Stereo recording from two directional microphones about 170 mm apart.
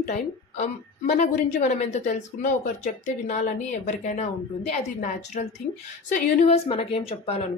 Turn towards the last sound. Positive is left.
turn(degrees=35)  # may be behind; listen again after turning